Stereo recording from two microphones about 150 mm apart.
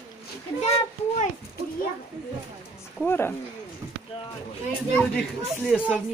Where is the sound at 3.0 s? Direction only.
15° left (ahead or behind).